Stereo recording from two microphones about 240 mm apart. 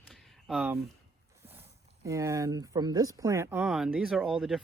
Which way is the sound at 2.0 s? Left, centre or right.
Centre.